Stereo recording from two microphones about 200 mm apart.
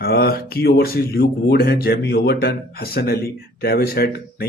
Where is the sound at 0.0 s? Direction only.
50° left (ahead or behind).